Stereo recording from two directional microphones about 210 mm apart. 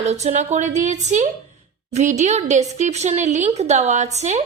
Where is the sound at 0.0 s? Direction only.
30° right (ahead or behind).